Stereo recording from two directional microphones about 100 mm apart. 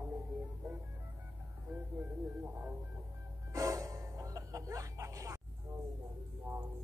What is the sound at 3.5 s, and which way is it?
Music, 35° right (ahead or behind).